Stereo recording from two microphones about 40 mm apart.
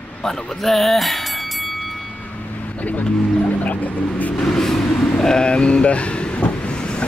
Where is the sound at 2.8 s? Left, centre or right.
Left.